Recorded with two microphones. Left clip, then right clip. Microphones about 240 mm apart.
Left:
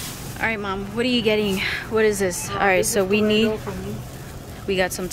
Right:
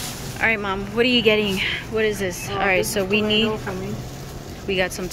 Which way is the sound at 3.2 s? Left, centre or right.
Left.